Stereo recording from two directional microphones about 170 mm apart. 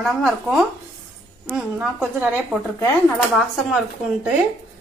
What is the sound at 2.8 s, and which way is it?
A woman's voice, 5° left (ahead or behind).